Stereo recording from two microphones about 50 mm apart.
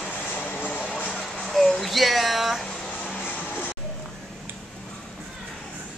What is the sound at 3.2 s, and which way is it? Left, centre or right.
Music, left.